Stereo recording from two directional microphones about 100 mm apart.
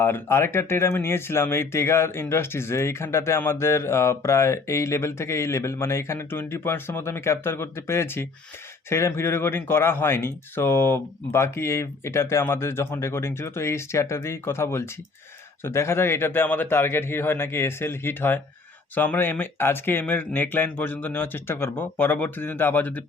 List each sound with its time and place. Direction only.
0.0 s speech: 25° left (ahead or behind)